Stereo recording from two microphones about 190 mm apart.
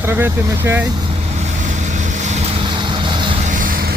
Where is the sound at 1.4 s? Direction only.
40° right (ahead or behind).